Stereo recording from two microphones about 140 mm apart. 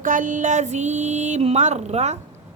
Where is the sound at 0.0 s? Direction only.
70° right (ahead or behind).